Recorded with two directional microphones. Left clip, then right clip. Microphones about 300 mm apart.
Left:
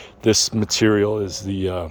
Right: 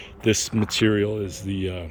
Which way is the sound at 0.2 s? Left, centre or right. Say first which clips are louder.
Left 5 dB; centre.